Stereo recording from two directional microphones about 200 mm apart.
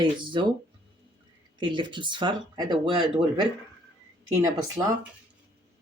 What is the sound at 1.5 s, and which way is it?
Speech, 25° right (ahead or behind).